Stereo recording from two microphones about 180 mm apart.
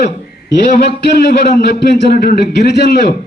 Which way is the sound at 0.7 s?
65° left (ahead or behind).